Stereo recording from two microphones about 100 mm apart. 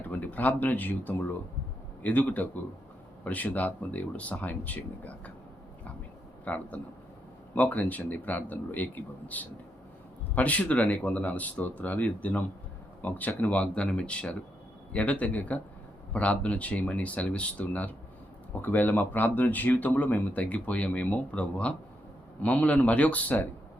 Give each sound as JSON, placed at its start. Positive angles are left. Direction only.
{"t": 0.1, "sound": "speech", "side_deg": 15}
{"t": 6.4, "sound": "speech", "side_deg": 15}